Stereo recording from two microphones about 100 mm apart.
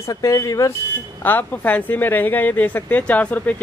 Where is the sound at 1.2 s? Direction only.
20° left (ahead or behind).